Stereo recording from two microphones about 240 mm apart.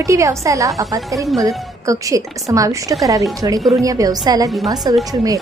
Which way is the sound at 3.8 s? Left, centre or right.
Centre.